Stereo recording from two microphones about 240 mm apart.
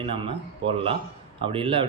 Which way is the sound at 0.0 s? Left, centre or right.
Right.